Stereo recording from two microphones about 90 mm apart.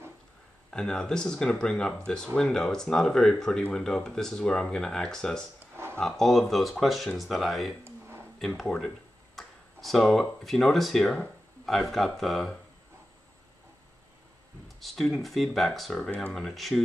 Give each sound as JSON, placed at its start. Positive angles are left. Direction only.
{"t": 0.7, "sound": "speech", "side_deg": 5}
{"t": 7.8, "sound": "a sound", "side_deg": -25}
{"t": 8.5, "sound": "speech", "side_deg": 5}
{"t": 14.8, "sound": "speech", "side_deg": 0}